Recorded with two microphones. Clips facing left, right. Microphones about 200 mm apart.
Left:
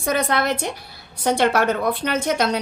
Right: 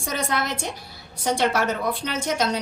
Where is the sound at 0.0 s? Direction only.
60° left (ahead or behind).